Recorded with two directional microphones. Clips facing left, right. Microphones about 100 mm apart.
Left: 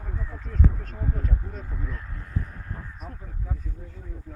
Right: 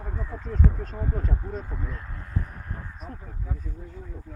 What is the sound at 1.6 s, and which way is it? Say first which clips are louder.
Speech: right 1 dB; 10° right (ahead or behind).